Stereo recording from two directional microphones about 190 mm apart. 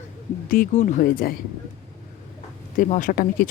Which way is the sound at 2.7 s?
45° left (ahead or behind).